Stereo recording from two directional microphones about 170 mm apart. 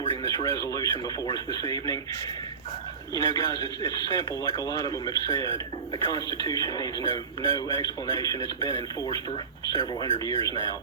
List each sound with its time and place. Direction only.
0.0 s speech: 25° left (ahead or behind)
3.2 s speech: 25° left (ahead or behind)